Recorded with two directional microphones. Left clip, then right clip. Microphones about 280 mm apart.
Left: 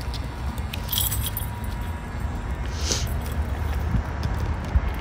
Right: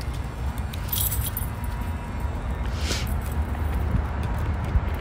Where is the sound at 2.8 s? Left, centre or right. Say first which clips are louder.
Left 2 dB; centre.